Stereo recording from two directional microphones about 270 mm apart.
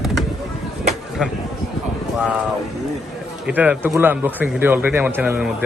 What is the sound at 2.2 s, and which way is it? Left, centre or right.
Speech, centre.